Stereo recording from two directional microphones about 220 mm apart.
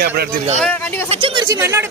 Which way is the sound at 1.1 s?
20° right (ahead or behind).